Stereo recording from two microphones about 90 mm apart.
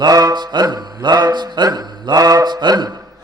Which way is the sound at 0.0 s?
40° right (ahead or behind).